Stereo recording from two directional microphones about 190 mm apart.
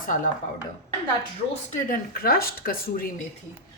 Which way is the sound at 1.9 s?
50° left (ahead or behind).